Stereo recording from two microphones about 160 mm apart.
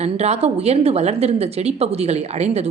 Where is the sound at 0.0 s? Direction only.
40° right (ahead or behind).